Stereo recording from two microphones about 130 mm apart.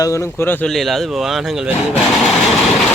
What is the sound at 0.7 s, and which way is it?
Speech, centre (ahead or behind).